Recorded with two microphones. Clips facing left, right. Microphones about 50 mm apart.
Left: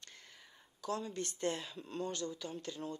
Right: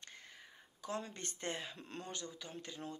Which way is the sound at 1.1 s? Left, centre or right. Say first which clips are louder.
Left 6 dB; right.